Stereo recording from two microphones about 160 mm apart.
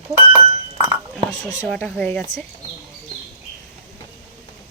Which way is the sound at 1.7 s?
10° left (ahead or behind).